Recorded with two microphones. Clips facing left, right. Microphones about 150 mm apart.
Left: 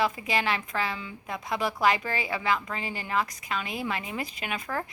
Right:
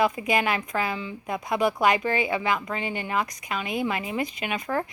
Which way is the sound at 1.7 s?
20° right (ahead or behind).